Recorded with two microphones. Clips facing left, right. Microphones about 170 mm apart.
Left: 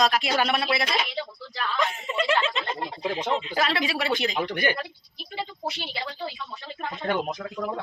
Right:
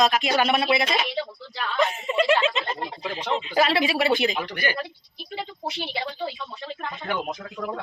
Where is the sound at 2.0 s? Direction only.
15° right (ahead or behind).